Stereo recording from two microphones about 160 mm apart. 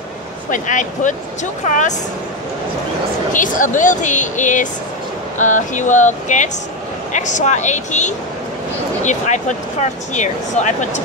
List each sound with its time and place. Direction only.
0.5 s speech: 50° left (ahead or behind)
3.3 s speech: 55° left (ahead or behind)